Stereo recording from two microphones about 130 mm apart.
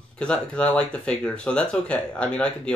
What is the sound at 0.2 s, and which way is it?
Speech, 10° left (ahead or behind).